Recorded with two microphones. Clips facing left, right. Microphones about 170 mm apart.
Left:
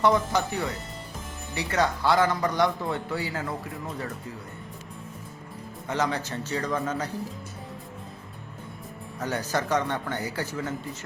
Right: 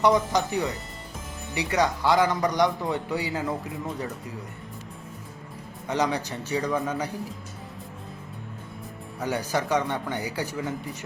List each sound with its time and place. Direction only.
0.0 s a man's voice: 15° right (ahead or behind)
5.9 s a man's voice: 15° right (ahead or behind)
9.1 s a man's voice: 10° right (ahead or behind)